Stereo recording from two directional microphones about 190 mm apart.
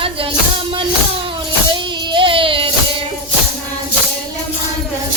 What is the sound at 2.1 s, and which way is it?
Music, 25° right (ahead or behind).